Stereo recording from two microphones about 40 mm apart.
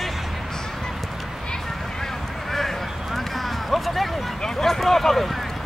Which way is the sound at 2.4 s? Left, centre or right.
Centre.